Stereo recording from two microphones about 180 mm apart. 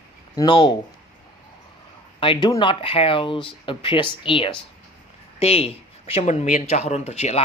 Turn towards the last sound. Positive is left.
turn(degrees=35)  # may be behind; listen again after turning